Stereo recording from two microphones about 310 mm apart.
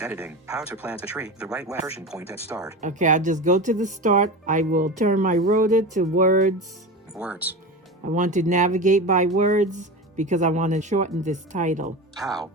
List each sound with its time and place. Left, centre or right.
0.0 s speech: centre
2.8 s speech: right
7.2 s speech: centre
8.0 s speech: right
12.1 s speech: centre